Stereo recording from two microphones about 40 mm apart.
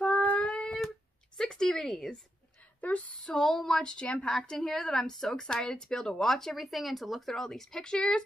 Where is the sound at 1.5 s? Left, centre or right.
Centre.